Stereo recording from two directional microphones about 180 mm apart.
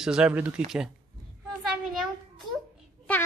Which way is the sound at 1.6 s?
Centre (ahead or behind).